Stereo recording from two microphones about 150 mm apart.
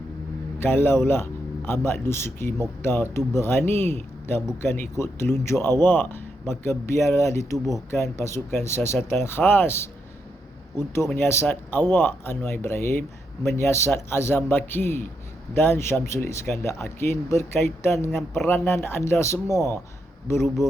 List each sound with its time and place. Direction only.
0.6 s a man's voice: 15° left (ahead or behind)